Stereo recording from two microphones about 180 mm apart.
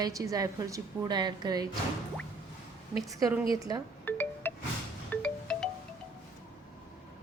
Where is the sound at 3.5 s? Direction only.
20° right (ahead or behind).